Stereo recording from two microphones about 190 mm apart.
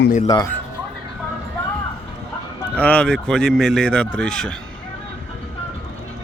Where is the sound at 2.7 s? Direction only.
10° left (ahead or behind).